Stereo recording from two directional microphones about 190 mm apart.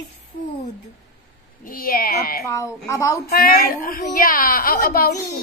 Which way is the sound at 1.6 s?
50° left (ahead or behind).